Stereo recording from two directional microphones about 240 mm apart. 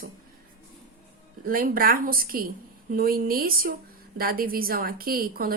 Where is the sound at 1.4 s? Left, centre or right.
Right.